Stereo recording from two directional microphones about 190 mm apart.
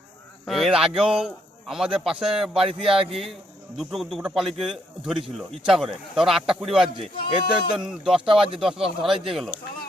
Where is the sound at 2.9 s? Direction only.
30° right (ahead or behind).